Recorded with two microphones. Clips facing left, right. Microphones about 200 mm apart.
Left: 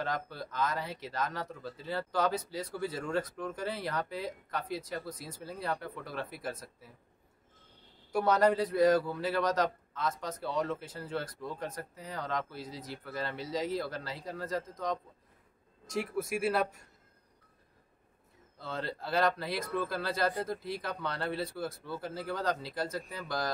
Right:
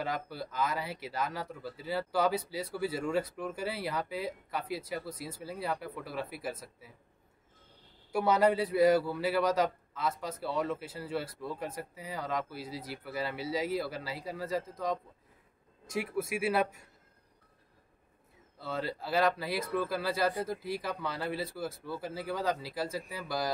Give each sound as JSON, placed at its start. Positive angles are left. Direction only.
{"t": 0.0, "sound": "speech", "side_deg": -5}
{"t": 8.1, "sound": "speech", "side_deg": -5}
{"t": 18.6, "sound": "speech", "side_deg": -5}